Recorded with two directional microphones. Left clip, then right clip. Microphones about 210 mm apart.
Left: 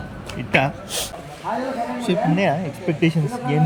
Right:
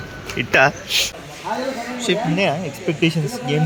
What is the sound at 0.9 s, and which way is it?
Speech, 40° left (ahead or behind).